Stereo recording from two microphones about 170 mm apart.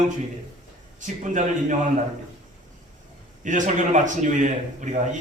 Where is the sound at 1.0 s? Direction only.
45° right (ahead or behind).